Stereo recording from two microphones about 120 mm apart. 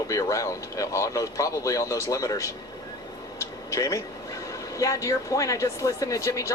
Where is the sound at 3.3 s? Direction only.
25° left (ahead or behind).